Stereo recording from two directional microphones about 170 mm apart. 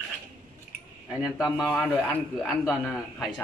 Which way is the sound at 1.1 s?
5° right (ahead or behind).